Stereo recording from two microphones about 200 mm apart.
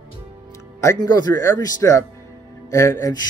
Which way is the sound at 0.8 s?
20° left (ahead or behind).